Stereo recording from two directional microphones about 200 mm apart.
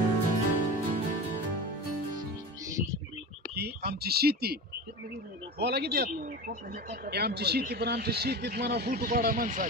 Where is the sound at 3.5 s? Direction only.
50° right (ahead or behind).